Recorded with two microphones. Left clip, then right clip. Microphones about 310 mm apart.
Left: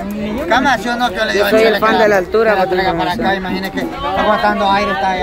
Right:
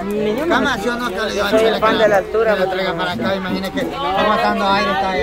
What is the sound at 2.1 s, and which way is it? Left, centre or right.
Speech, left.